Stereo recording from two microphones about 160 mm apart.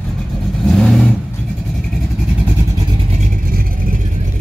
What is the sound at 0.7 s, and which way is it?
Vehicle, 5° left (ahead or behind).